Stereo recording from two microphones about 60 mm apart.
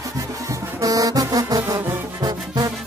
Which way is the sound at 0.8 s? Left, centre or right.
Right.